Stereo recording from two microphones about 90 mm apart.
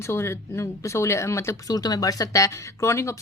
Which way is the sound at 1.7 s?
45° left (ahead or behind).